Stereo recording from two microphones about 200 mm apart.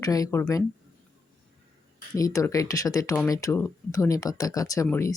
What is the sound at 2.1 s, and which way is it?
Speech, 15° left (ahead or behind).